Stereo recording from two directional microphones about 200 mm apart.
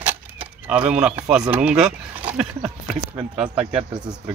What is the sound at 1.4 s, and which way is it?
Speech, 5° right (ahead or behind).